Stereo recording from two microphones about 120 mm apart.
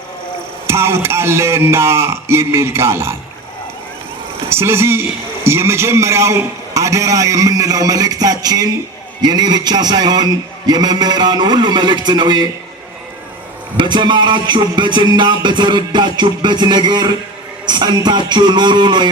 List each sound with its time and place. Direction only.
0.7 s a man's voice: 20° right (ahead or behind)
4.4 s a man's voice: 20° right (ahead or behind)
9.2 s music: 35° right (ahead or behind)
13.7 s music: 40° right (ahead or behind)